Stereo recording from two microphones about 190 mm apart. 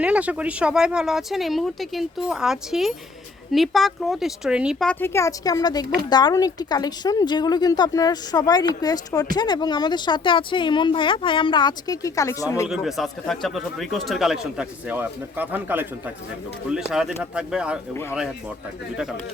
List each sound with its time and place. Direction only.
0.0 s speech: 5° right (ahead or behind); by 12.6 s 15° left (ahead or behind)
12.6 s speech: centre (ahead or behind)